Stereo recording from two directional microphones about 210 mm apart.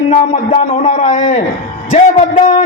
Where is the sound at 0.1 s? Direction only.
30° left (ahead or behind).